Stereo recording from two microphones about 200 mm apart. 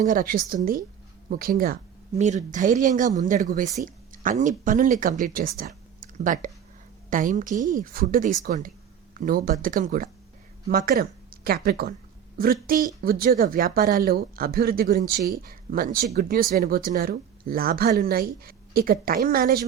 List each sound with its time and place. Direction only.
0.0 s speech: 45° right (ahead or behind)